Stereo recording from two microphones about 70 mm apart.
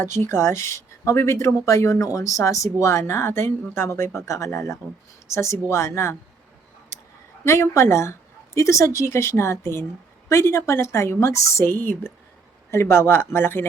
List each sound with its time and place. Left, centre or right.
0.0 s speech: left
7.4 s speech: left